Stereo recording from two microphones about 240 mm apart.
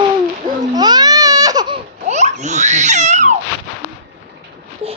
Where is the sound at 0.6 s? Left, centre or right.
Centre.